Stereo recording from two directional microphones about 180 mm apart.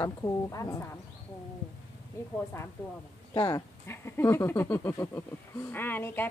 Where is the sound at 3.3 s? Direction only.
20° left (ahead or behind).